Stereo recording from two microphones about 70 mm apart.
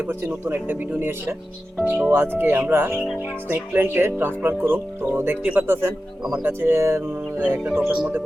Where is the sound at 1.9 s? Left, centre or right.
Centre.